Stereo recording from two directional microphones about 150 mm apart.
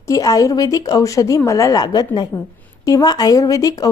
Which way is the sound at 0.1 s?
20° left (ahead or behind).